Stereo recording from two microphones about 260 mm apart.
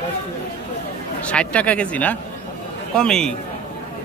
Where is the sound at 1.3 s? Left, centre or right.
Centre.